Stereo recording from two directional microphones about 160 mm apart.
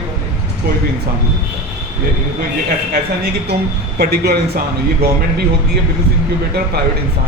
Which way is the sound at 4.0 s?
75° right (ahead or behind).